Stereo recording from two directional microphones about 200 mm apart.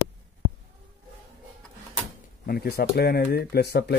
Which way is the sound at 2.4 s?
50° left (ahead or behind).